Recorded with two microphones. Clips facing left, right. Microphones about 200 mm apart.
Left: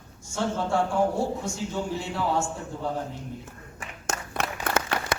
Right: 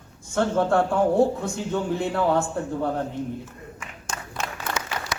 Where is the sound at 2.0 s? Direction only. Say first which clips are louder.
Right 5 dB; 60° right (ahead or behind).